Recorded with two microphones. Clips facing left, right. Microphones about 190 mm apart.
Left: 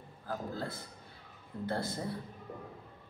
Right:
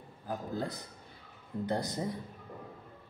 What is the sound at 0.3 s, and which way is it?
A man's voice, 15° right (ahead or behind).